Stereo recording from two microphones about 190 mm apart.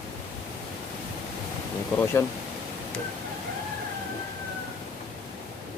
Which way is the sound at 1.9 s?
10° left (ahead or behind).